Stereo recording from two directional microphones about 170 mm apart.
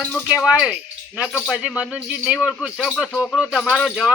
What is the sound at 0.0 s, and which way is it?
Speech, 5° left (ahead or behind).